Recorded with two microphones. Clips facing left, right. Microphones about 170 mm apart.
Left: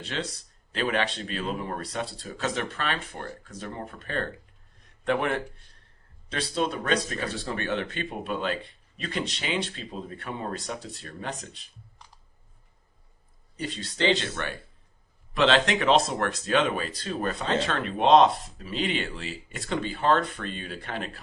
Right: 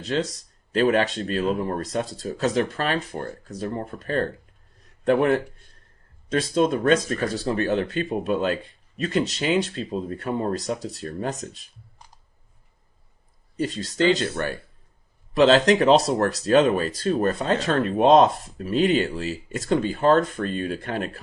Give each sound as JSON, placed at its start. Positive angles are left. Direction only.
{"t": 0.0, "sound": "speech", "side_deg": -40}
{"t": 13.6, "sound": "speech", "side_deg": -40}